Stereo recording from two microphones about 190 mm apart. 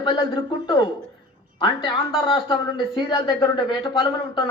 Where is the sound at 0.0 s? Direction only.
25° left (ahead or behind).